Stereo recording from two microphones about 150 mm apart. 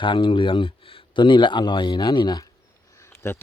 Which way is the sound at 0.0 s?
35° left (ahead or behind).